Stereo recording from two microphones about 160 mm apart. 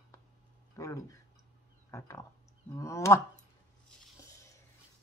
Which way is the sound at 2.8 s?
20° left (ahead or behind).